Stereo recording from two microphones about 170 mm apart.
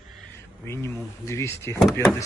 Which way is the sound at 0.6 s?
15° left (ahead or behind).